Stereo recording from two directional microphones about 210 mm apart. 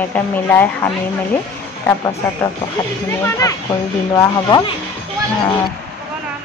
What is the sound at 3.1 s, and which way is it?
Speech, 15° left (ahead or behind).